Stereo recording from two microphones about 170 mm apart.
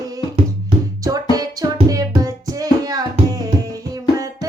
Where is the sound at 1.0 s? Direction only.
20° right (ahead or behind).